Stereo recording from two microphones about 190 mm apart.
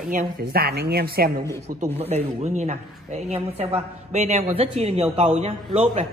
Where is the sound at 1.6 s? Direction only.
35° right (ahead or behind).